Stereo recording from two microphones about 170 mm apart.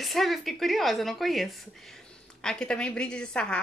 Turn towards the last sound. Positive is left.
turn(degrees=5)  # may be behind; listen again after turning